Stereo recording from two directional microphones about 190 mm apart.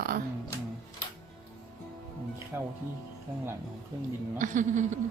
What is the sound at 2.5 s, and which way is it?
Speech, 10° right (ahead or behind).